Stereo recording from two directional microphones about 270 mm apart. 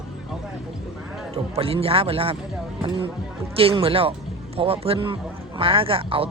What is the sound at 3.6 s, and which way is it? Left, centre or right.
A man's voice, centre.